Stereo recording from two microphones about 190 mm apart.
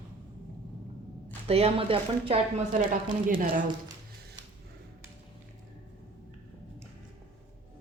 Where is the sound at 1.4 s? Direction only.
30° right (ahead or behind).